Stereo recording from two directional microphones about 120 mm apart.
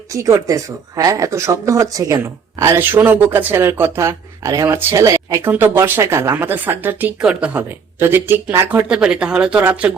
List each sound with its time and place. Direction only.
0.1 s speech: 25° right (ahead or behind)